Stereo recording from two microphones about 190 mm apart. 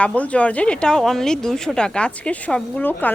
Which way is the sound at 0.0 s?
5° left (ahead or behind).